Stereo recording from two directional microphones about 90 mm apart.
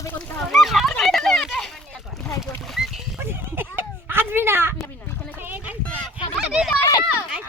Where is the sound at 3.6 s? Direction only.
25° right (ahead or behind).